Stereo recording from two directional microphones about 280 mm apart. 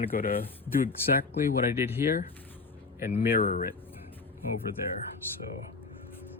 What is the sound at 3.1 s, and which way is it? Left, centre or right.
Speech, left.